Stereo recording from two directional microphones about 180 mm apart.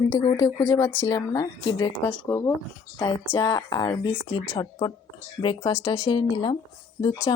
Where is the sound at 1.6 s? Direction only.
25° left (ahead or behind).